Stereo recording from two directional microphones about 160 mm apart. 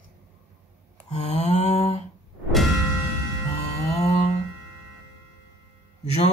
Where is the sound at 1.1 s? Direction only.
45° left (ahead or behind).